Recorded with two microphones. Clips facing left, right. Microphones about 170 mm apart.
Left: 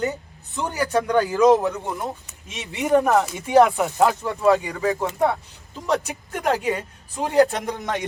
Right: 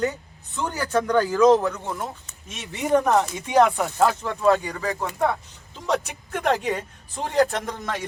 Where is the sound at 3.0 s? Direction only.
5° left (ahead or behind).